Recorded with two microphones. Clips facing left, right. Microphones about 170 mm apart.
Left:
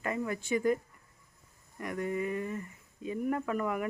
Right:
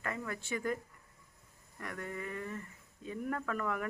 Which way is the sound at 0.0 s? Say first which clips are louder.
Left 6 dB; 15° left (ahead or behind).